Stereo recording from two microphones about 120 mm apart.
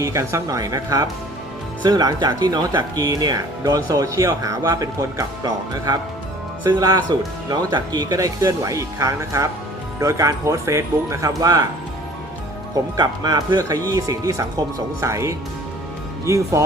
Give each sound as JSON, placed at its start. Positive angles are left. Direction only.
{"t": 0.0, "sound": "speech", "side_deg": -25}
{"t": 12.7, "sound": "speech", "side_deg": -35}